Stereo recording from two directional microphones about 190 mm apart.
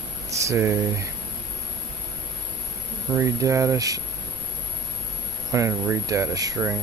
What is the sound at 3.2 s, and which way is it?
Speech, 15° right (ahead or behind).